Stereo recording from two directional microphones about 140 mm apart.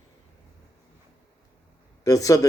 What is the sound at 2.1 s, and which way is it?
Speech, 25° left (ahead or behind).